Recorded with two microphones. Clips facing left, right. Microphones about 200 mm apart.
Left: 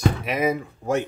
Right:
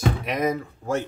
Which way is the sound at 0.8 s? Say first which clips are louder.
Left 3 dB; 15° left (ahead or behind).